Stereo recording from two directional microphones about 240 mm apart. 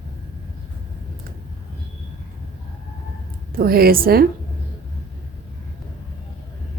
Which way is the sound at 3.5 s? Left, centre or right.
Right.